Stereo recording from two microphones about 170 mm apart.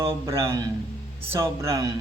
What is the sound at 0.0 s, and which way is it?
Speech, 15° right (ahead or behind).